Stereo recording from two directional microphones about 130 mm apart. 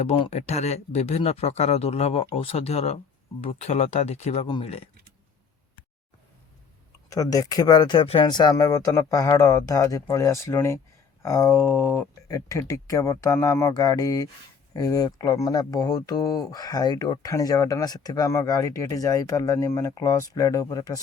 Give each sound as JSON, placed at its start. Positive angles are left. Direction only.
{"t": 0.0, "sound": "speech", "side_deg": 55}
{"t": 4.4, "sound": "speech", "side_deg": 45}
{"t": 7.1, "sound": "speech", "side_deg": 25}